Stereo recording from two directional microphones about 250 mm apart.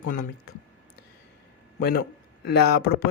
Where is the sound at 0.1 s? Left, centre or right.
Left.